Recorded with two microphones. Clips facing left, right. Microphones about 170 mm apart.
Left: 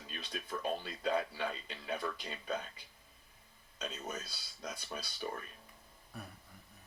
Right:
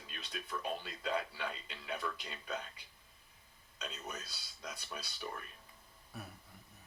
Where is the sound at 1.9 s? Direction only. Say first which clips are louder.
Left 2 dB; 50° left (ahead or behind).